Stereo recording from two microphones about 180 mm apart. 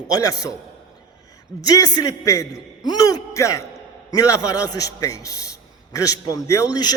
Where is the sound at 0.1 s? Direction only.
20° left (ahead or behind).